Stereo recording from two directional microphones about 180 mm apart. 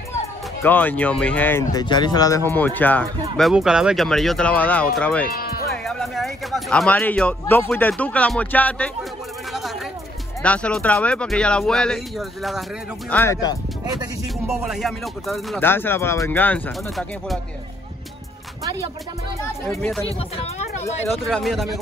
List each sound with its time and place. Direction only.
0.6 s speech: 10° left (ahead or behind)
3.3 s speech: centre (ahead or behind)
5.3 s music: 55° left (ahead or behind)
5.9 s speech: centre (ahead or behind)
10.4 s speech: 5° left (ahead or behind)
13.1 s speech: 15° left (ahead or behind)
14.5 s speech: centre (ahead or behind)
15.6 s speech: 10° left (ahead or behind)
18.6 s music: 20° right (ahead or behind)
20.0 s speech: 30° left (ahead or behind)
21.2 s speech: centre (ahead or behind)